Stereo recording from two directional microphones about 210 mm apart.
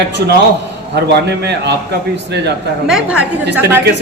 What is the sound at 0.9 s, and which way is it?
Speech, 50° right (ahead or behind).